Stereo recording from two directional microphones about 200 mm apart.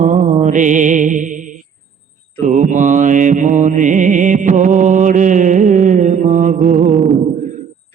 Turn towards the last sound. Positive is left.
turn(degrees=-35)  # may be behind; listen again after turning